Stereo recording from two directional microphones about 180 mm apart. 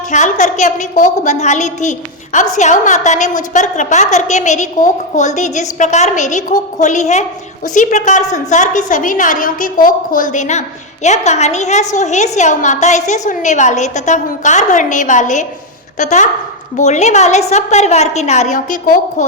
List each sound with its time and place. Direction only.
0.1 s a woman's voice: 45° left (ahead or behind)